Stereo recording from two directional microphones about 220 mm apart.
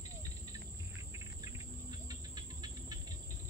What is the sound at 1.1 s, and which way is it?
Cricket, 15° right (ahead or behind).